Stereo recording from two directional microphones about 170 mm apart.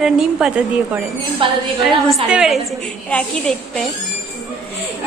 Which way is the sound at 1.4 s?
30° right (ahead or behind).